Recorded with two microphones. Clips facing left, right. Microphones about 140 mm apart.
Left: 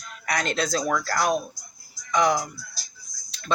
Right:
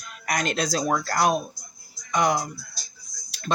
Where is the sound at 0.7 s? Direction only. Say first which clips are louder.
Right 2 dB; 25° right (ahead or behind).